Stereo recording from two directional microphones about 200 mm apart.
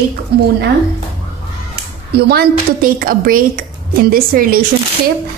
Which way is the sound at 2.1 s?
55° right (ahead or behind).